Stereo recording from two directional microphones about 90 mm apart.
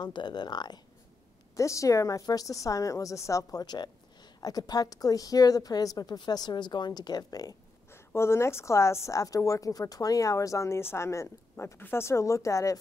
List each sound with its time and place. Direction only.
0.0 s speech: 55° left (ahead or behind)
1.6 s a woman's voice: 35° left (ahead or behind)
3.6 s a woman's voice: 50° left (ahead or behind)
7.9 s a woman's voice: 30° left (ahead or behind)